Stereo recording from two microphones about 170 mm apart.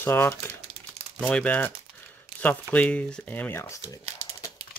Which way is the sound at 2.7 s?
5° left (ahead or behind).